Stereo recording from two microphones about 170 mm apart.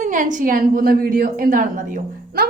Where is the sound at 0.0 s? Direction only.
50° right (ahead or behind).